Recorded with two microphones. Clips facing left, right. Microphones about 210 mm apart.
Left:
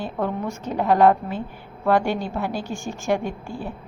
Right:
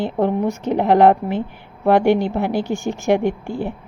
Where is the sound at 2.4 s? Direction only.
65° right (ahead or behind).